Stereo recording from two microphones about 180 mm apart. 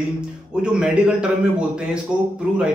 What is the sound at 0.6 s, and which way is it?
Speech, 5° right (ahead or behind).